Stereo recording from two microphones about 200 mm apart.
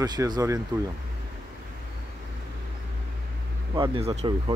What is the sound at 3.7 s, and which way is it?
Speech, 25° right (ahead or behind).